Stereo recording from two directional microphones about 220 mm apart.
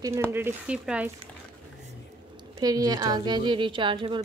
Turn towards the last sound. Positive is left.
turn(degrees=-20)  # may be behind; listen again after turning